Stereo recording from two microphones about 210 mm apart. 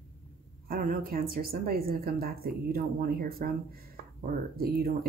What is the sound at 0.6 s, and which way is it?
Speech, 45° right (ahead or behind).